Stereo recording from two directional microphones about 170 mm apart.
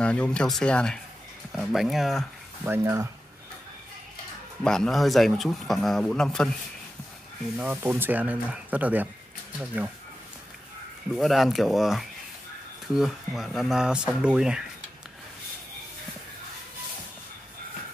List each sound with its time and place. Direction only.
0.0 s a man's voice: 5° left (ahead or behind)
2.6 s speech: 15° right (ahead or behind)
4.6 s a man's voice: 5° left (ahead or behind)
7.5 s speech: 10° right (ahead or behind)
11.1 s a man's voice: centre (ahead or behind)